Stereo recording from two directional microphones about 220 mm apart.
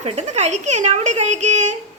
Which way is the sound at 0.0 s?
30° right (ahead or behind).